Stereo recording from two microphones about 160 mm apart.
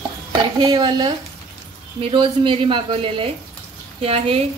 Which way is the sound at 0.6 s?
25° right (ahead or behind).